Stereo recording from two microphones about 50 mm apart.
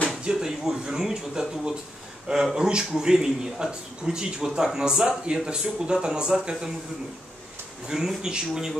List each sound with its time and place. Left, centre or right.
0.2 s speech: centre
7.9 s speech: centre